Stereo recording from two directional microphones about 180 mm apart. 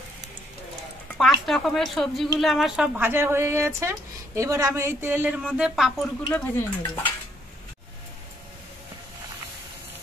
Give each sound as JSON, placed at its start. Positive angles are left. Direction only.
{"t": 1.1, "sound": "a woman's voice", "side_deg": 0}
{"t": 6.3, "sound": "speech", "side_deg": 10}